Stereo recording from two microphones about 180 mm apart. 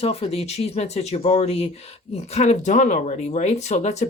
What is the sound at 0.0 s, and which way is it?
Speech, 35° left (ahead or behind).